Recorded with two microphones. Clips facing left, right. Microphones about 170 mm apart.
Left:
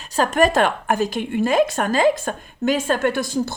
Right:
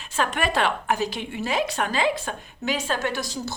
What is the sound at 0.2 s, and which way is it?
A woman's voice, 40° left (ahead or behind).